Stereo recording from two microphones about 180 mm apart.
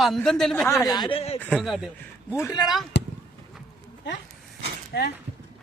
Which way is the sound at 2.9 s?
70° left (ahead or behind).